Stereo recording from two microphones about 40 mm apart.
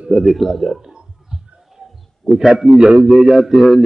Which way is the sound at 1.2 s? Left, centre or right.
Centre.